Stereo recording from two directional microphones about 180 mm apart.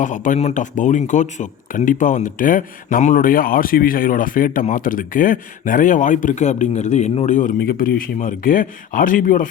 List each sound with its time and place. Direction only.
0.0 s speech: 45° left (ahead or behind)